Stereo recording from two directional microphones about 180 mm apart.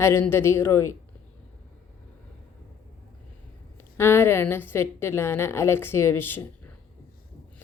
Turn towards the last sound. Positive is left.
turn(degrees=10)  # may be behind; listen again after turning